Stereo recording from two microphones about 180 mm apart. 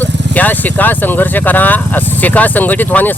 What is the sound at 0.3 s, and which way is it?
A woman's voice, 10° left (ahead or behind).